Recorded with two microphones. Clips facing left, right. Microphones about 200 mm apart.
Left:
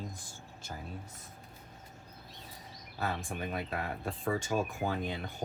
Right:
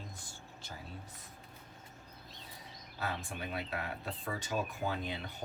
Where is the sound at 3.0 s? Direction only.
50° left (ahead or behind).